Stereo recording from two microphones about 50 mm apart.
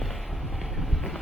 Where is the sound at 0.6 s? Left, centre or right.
Centre.